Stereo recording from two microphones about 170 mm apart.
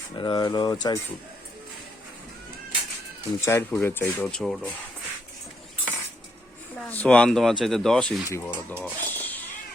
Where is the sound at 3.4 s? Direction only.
15° left (ahead or behind).